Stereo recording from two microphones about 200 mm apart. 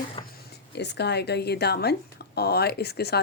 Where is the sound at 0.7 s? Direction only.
55° left (ahead or behind).